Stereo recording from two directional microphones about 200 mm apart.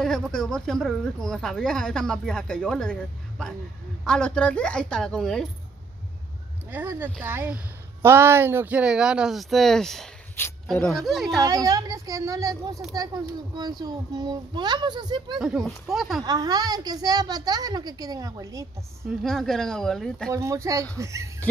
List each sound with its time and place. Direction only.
0.3 s speech: 5° left (ahead or behind)
6.7 s speech: 10° right (ahead or behind)
11.4 s a child's voice: 20° right (ahead or behind)
15.3 s speech: 5° right (ahead or behind)
16.3 s a child's voice: 20° right (ahead or behind)
19.0 s speech: centre (ahead or behind)
20.2 s speech: 15° right (ahead or behind)